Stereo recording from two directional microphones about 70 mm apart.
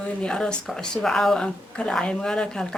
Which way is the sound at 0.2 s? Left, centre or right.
Centre.